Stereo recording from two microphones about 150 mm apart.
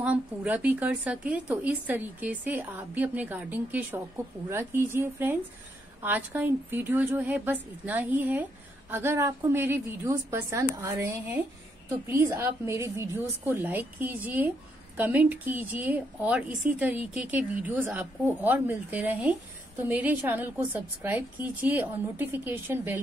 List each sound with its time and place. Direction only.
0.0 s a woman's voice: 10° right (ahead or behind)